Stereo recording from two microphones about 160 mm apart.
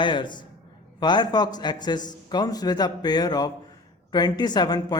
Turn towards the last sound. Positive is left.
turn(degrees=25)  # may be behind; listen again after turning